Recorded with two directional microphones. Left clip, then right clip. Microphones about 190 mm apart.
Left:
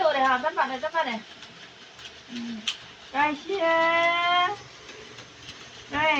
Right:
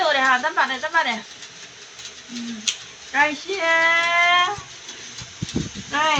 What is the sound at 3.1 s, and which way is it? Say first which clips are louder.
Speech: right 5 dB; 25° right (ahead or behind).